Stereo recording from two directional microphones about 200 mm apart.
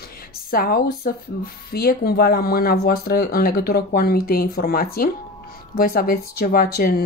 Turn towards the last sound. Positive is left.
turn(degrees=45)  # may be behind; listen again after turning